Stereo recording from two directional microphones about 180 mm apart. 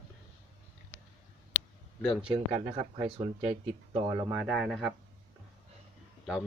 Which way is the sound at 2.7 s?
25° right (ahead or behind).